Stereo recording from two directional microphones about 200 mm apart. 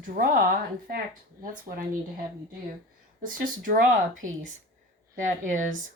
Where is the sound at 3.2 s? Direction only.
45° right (ahead or behind).